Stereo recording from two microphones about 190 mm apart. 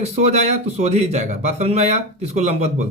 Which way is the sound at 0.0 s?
35° right (ahead or behind).